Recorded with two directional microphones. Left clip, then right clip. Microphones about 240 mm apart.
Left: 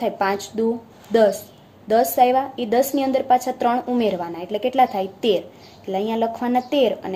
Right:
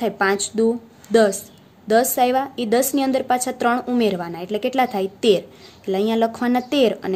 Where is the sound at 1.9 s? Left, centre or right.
Right.